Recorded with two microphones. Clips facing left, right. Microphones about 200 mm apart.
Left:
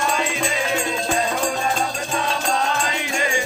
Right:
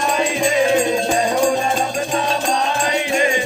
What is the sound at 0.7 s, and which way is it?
Music, 20° right (ahead or behind).